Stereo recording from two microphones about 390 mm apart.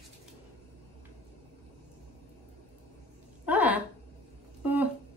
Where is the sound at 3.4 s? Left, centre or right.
Centre.